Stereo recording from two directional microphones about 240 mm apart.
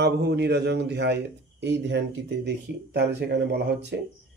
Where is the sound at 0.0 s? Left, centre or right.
Right.